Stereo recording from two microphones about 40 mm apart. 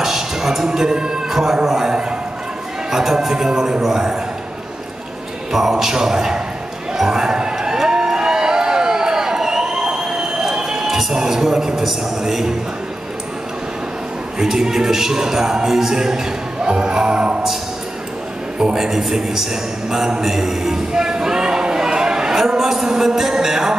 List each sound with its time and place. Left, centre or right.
0.0 s music: centre
1.3 s a man's voice: centre
2.9 s music: centre
5.5 s music: centre
6.9 s crowd: centre
10.5 s a man's voice: centre
14.4 s music: centre
18.8 s a sound: centre